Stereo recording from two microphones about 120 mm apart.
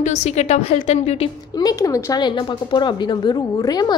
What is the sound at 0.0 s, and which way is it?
A woman's voice, 70° left (ahead or behind).